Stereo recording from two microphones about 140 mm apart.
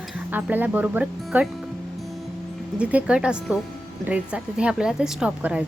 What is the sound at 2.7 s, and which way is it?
A woman's voice, 10° right (ahead or behind).